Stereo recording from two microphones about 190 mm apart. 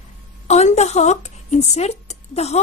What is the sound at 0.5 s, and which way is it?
Speech, 35° left (ahead or behind).